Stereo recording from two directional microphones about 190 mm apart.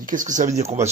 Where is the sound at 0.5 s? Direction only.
15° right (ahead or behind).